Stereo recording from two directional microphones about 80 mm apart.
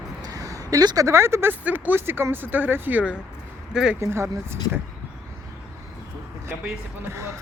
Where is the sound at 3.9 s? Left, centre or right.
Right.